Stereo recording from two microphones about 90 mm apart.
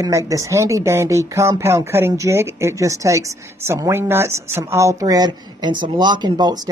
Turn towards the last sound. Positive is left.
turn(degrees=-50)  # may be behind; listen again after turning